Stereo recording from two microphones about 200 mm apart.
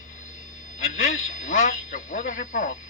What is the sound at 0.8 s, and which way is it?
Speech, 45° left (ahead or behind).